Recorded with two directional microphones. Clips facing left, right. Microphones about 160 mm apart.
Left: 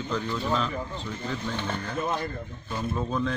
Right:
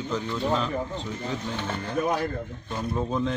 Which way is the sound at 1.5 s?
Centre (ahead or behind).